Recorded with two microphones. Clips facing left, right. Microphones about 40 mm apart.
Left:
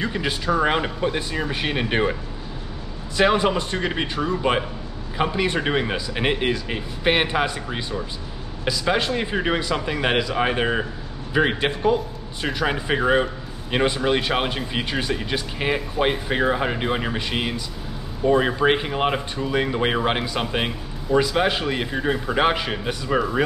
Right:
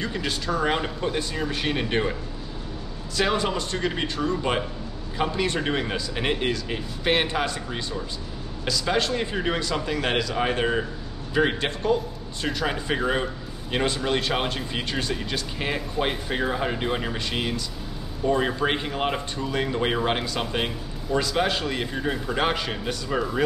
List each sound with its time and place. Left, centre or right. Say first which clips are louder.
0.0 s speech: left 4 dB; centre
3.2 s speech: left 5 dB; centre